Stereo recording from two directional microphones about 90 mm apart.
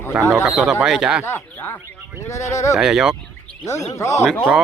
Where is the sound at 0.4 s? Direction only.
5° right (ahead or behind).